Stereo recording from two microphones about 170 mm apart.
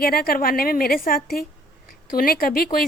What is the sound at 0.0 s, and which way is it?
A woman's voice, 60° left (ahead or behind).